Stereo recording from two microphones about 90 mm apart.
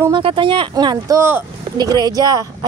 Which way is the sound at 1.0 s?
30° right (ahead or behind).